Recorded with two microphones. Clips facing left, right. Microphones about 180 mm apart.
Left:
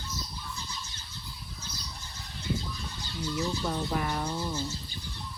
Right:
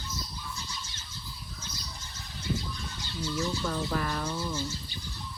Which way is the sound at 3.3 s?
15° left (ahead or behind).